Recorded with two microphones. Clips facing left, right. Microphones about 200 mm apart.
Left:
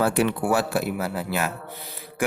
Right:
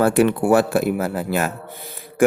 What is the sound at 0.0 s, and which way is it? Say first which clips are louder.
Speech: right 6 dB; 50° right (ahead or behind).